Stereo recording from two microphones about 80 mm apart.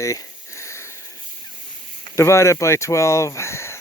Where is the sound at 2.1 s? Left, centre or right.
Left.